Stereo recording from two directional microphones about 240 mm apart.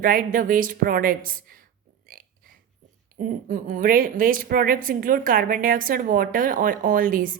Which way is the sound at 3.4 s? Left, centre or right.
Right.